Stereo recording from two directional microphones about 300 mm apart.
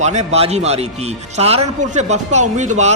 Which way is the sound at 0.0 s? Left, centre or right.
Right.